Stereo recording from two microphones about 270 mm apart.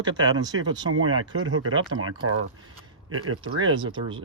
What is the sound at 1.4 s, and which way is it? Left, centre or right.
Speech, right.